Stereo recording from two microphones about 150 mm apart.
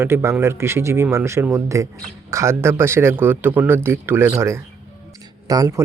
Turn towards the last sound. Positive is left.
turn(degrees=-25)  # may be behind; listen again after turning